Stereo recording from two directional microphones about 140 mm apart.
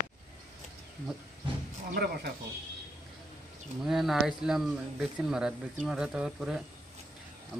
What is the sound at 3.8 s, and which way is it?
Speech, centre (ahead or behind).